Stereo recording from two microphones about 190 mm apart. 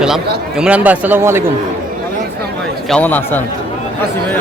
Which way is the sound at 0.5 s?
5° right (ahead or behind).